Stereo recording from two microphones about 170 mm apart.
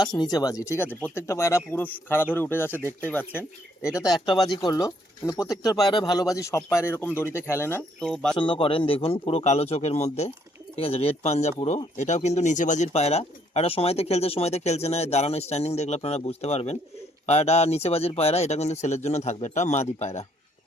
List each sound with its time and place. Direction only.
0.2 s speech: 20° left (ahead or behind); by 8.4 s 5° left (ahead or behind)
8.4 s speech: 30° left (ahead or behind)